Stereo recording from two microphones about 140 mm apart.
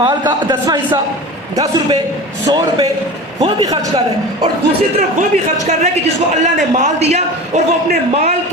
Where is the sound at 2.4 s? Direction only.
30° right (ahead or behind).